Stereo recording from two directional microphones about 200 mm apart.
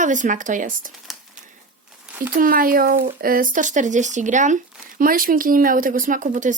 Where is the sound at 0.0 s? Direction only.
40° right (ahead or behind).